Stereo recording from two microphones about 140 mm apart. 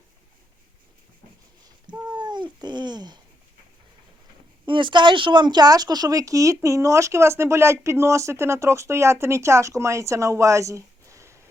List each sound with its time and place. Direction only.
2.0 s cat: 30° right (ahead or behind)
4.6 s speech: 35° right (ahead or behind); by 11.4 s 20° right (ahead or behind)